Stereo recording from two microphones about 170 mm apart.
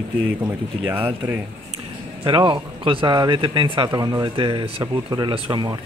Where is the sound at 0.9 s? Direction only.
10° right (ahead or behind).